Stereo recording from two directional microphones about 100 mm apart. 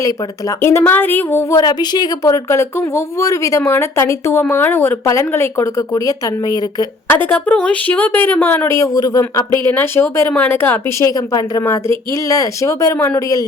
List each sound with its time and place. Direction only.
0.0 s speech: 30° left (ahead or behind)
1.5 s speech: 40° left (ahead or behind)
7.1 s speech: 20° left (ahead or behind); by 9.5 s 40° left (ahead or behind)
9.6 s speech: 25° left (ahead or behind)
11.0 s speech: 40° left (ahead or behind)